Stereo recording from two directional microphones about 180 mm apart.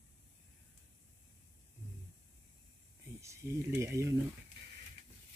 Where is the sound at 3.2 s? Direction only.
15° right (ahead or behind).